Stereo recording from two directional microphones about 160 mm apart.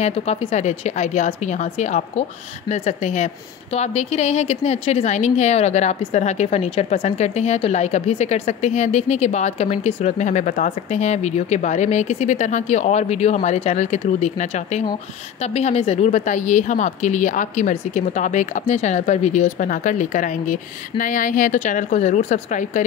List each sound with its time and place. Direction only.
0.0 s a woman's voice: 40° left (ahead or behind)